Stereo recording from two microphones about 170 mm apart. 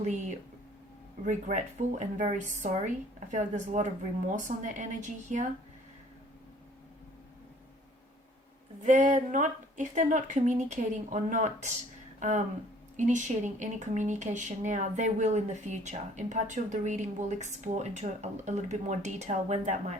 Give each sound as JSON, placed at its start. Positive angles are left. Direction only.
{"t": 0.0, "sound": "speech", "side_deg": -45}
{"t": 8.8, "sound": "speech", "side_deg": -45}